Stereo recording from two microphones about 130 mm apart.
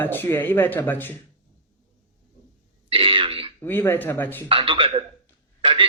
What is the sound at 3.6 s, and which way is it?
Speech, 15° left (ahead or behind).